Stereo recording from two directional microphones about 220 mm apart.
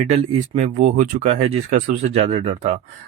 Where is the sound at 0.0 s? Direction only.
30° right (ahead or behind).